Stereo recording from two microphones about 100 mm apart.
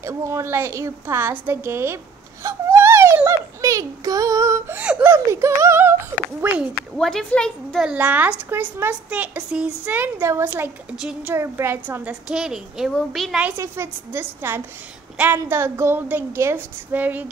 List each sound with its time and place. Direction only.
0.0 s a woman's voice: 30° right (ahead or behind)
2.4 s baby cry: 25° right (ahead or behind)
3.3 s a woman's voice: 30° right (ahead or behind)
7.0 s a woman's voice: 5° left (ahead or behind)
7.8 s a woman's voice: 15° right (ahead or behind)
12.0 s a woman's voice: 10° right (ahead or behind)
13.4 s a woman's voice: 20° right (ahead or behind)